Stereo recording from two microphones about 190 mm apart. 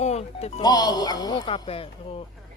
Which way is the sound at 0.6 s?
20° left (ahead or behind).